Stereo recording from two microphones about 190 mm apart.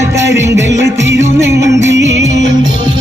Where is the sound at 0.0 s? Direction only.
15° right (ahead or behind).